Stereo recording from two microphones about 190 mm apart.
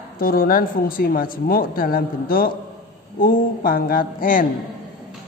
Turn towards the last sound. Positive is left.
turn(degrees=45)  # may be behind; listen again after turning